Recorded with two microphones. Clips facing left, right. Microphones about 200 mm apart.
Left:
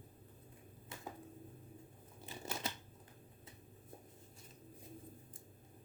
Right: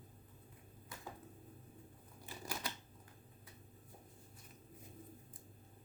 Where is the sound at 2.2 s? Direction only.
25° left (ahead or behind).